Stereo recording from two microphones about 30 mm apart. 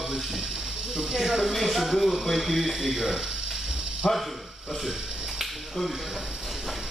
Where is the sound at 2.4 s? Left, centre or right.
Centre.